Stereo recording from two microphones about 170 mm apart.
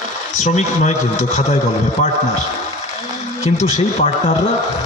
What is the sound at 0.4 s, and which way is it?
Speech, 45° left (ahead or behind).